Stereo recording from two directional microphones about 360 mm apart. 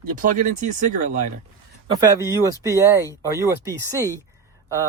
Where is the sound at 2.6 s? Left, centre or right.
Centre.